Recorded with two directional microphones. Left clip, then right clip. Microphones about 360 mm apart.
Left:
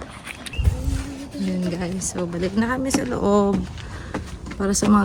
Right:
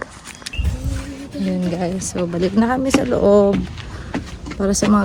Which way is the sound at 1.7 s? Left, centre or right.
Centre.